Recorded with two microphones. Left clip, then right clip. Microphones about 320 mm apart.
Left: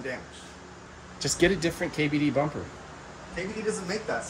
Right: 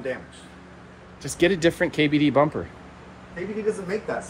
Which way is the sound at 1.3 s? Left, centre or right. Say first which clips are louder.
Right 5 dB; centre.